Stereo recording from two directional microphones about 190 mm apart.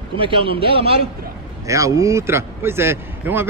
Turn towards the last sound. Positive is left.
turn(degrees=-10)  # may be behind; listen again after turning